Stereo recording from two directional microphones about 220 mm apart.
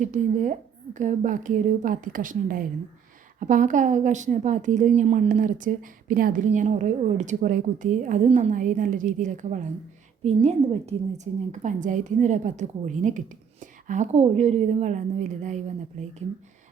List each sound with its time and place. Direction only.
0.0 s a woman's voice: 35° right (ahead or behind)